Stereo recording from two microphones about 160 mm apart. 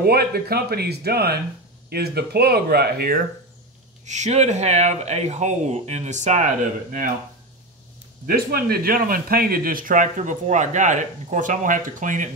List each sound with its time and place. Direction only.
0.0 s speech: 75° right (ahead or behind)
4.0 s speech: 45° right (ahead or behind)
8.3 s speech: 65° right (ahead or behind)